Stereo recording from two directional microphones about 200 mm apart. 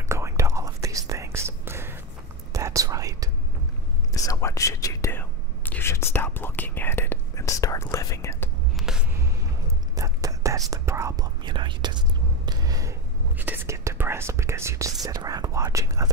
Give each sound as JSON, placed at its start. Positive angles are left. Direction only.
{"t": 0.1, "sound": "whispering", "side_deg": -15}
{"t": 4.1, "sound": "whispering", "side_deg": 15}
{"t": 8.7, "sound": "a sound", "side_deg": 0}
{"t": 9.9, "sound": "whispering", "side_deg": -15}
{"t": 12.4, "sound": "a sound", "side_deg": -20}
{"t": 13.4, "sound": "whispering", "side_deg": -10}